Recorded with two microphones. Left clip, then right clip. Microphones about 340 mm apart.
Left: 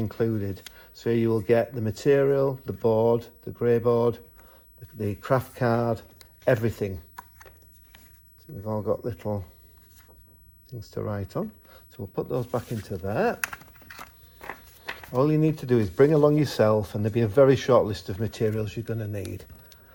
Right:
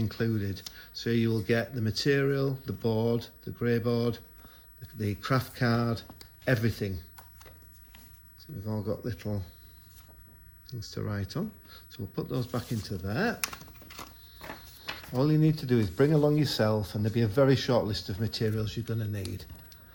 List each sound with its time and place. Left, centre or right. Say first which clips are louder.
0.0 s speech: left 5 dB; centre
8.6 s speech: left 7 dB; centre
10.7 s speech: left 6 dB; centre
15.1 s speech: left 5 dB; centre